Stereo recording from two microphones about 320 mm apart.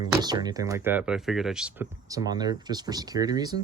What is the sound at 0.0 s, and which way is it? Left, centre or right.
Speech, centre.